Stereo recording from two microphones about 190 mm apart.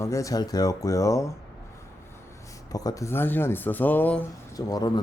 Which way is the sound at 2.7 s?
20° left (ahead or behind).